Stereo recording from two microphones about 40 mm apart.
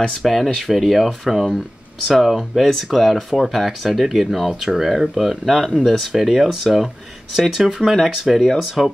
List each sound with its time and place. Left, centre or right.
0.1 s speech: centre